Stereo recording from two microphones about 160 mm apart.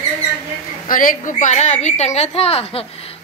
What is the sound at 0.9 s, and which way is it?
A woman's voice, 55° left (ahead or behind).